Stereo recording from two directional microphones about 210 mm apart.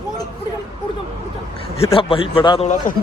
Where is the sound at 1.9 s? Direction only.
25° left (ahead or behind).